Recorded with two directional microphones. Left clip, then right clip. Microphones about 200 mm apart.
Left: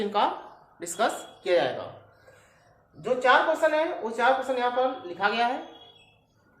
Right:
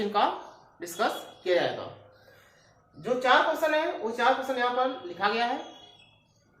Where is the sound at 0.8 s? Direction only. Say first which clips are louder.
Left 2 dB; 30° left (ahead or behind).